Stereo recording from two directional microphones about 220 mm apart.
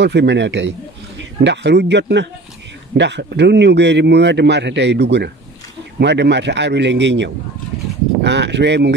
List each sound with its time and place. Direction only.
0.0 s speech: 50° right (ahead or behind)